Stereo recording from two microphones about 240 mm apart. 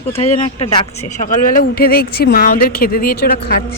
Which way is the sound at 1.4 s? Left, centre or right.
Left.